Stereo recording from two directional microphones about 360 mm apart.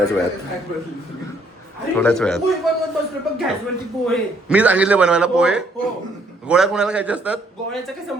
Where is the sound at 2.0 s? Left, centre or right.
Centre.